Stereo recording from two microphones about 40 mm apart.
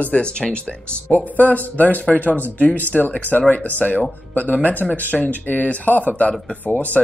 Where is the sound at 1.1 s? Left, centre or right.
Left.